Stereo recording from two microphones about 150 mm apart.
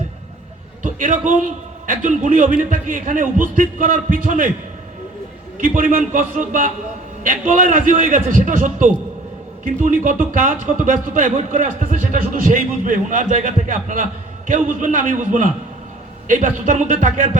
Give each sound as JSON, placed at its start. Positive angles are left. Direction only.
{"t": 0.8, "sound": "speech", "side_deg": -60}
{"t": 5.5, "sound": "speech", "side_deg": -65}